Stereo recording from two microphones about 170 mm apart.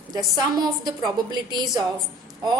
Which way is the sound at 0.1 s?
25° right (ahead or behind).